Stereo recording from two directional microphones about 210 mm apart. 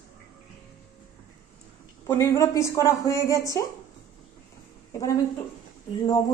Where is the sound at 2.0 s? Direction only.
15° left (ahead or behind).